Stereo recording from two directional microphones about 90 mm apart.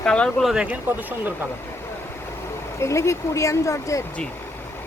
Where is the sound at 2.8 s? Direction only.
35° left (ahead or behind).